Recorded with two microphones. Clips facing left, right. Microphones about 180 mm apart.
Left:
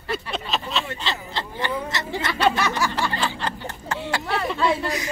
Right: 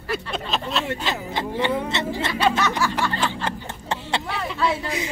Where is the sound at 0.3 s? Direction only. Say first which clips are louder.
Right 1 dB; centre (ahead or behind).